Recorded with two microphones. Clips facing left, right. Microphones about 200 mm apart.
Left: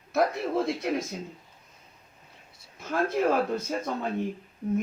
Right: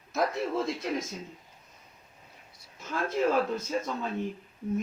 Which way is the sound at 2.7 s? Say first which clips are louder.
Left 4 dB; 60° left (ahead or behind).